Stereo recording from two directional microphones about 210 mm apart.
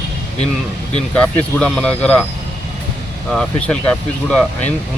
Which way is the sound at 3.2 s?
5° left (ahead or behind).